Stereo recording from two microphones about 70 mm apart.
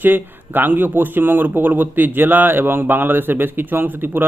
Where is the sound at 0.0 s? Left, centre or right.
Right.